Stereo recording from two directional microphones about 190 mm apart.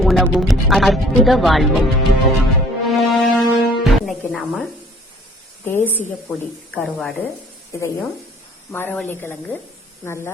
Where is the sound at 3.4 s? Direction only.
Centre (ahead or behind).